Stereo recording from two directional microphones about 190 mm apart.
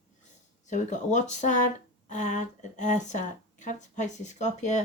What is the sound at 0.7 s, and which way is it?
A woman's voice, 40° left (ahead or behind).